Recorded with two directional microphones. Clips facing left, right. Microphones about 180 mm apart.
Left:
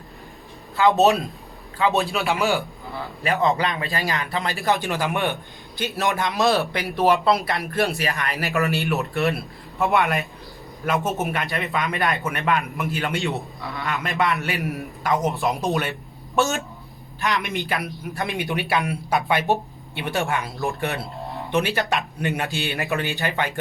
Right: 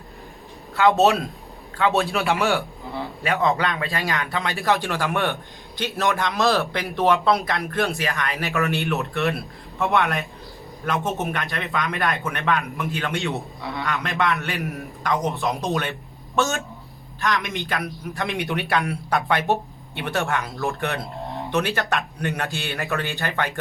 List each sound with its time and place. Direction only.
0.8 s speech: centre (ahead or behind)
15.8 s a sound: 5° left (ahead or behind)
17.2 s a woman's voice: 15° left (ahead or behind)
17.4 s speech: centre (ahead or behind)